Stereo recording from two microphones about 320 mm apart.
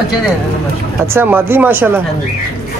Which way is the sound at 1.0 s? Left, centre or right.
Centre.